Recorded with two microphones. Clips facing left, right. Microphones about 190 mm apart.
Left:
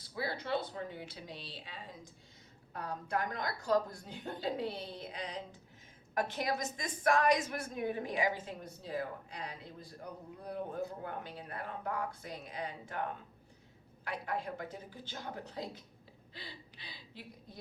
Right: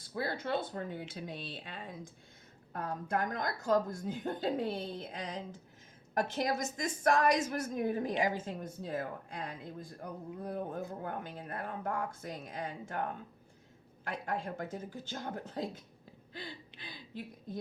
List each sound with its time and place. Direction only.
0.0 s speech: 50° right (ahead or behind)